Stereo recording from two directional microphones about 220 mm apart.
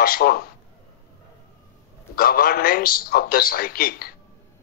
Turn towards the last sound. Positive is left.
turn(degrees=45)  # may be behind; listen again after turning